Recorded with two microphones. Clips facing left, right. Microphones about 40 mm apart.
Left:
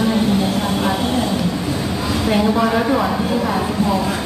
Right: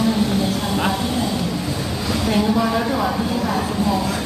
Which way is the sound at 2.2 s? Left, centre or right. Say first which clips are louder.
Left 2 dB; centre.